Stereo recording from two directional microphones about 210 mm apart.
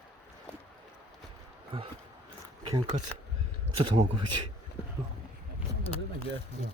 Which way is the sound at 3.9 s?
25° right (ahead or behind).